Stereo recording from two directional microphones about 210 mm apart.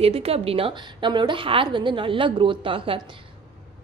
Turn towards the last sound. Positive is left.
turn(degrees=-25)  # may be behind; listen again after turning